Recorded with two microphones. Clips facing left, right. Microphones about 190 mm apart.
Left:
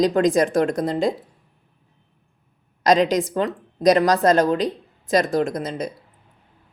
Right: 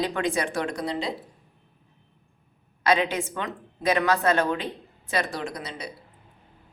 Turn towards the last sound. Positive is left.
turn(degrees=45)  # may be behind; listen again after turning